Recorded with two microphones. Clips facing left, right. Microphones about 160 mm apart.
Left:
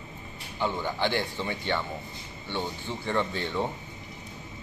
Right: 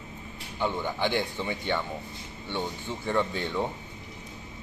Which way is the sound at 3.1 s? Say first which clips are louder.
Right 1 dB; 5° right (ahead or behind).